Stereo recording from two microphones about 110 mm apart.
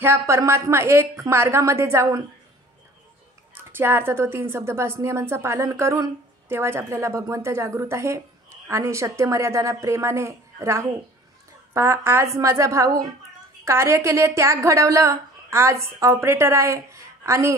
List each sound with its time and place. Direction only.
0.0 s a woman's voice: 20° right (ahead or behind)
3.7 s a woman's voice: 20° right (ahead or behind)